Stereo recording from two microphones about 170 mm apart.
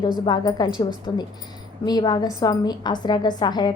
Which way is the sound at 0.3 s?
25° left (ahead or behind).